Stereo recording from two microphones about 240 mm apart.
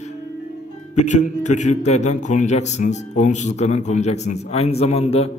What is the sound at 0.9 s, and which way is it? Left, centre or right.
A man's voice, left.